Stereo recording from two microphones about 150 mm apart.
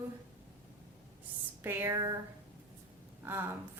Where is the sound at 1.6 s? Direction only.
15° right (ahead or behind).